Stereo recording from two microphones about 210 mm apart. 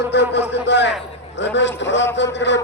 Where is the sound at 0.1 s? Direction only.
55° left (ahead or behind).